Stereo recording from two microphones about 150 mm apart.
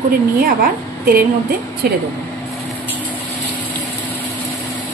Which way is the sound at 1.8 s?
90° right.